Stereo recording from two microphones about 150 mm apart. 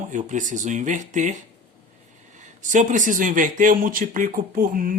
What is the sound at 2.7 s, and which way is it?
Speech, 55° right (ahead or behind).